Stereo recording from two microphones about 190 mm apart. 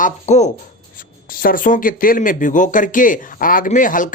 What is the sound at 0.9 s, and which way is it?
Speech, 50° left (ahead or behind).